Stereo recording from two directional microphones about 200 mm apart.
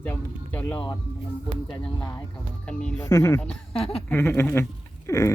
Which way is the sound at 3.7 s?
30° left (ahead or behind).